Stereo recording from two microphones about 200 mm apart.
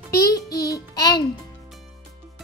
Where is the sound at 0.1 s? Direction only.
15° left (ahead or behind).